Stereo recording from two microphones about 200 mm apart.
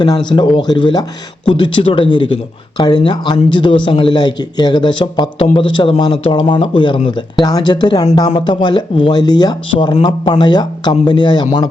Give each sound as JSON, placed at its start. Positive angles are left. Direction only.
{"t": 0.0, "sound": "speech", "side_deg": 20}